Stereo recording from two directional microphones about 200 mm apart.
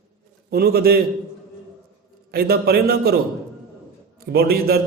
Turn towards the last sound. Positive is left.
turn(degrees=-50)  # may be behind; listen again after turning